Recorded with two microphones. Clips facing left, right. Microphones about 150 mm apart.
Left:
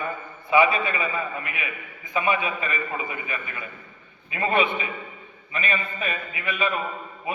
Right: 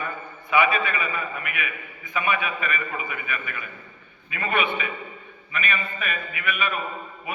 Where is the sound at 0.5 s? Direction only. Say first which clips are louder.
Left 2 dB; 30° left (ahead or behind).